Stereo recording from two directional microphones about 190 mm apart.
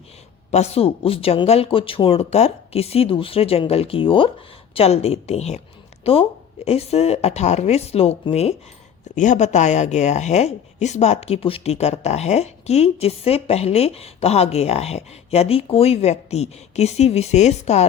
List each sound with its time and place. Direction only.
0.5 s speech: 35° left (ahead or behind)